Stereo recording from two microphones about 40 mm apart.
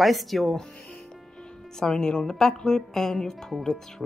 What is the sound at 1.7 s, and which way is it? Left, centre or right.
A woman's voice, centre.